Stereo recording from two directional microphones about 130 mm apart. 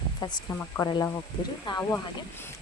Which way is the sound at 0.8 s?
20° left (ahead or behind).